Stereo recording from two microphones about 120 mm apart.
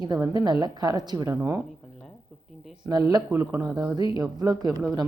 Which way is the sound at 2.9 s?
35° right (ahead or behind).